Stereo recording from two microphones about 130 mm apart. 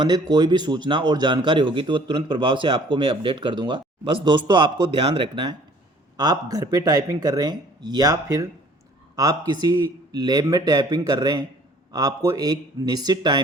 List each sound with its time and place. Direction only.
0.0 s a man's voice: 35° right (ahead or behind)
6.1 s a man's voice: 30° right (ahead or behind)